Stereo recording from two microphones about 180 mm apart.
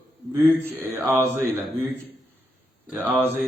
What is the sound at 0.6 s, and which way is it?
Speech, 10° right (ahead or behind).